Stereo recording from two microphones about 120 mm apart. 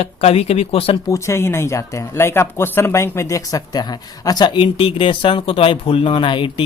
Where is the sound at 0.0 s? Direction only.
55° left (ahead or behind).